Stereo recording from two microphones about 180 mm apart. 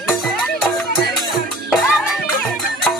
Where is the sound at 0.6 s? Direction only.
Centre (ahead or behind).